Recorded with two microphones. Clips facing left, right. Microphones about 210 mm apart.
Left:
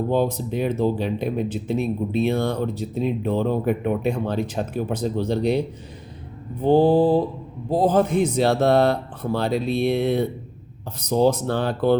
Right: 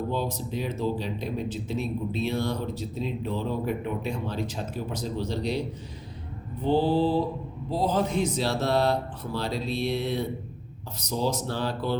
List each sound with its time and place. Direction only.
0.1 s speech: 55° left (ahead or behind)
6.6 s mantra: 50° left (ahead or behind)
7.7 s speech: 50° left (ahead or behind)